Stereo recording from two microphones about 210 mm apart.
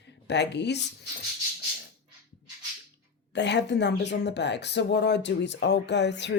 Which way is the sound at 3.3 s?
55° left (ahead or behind).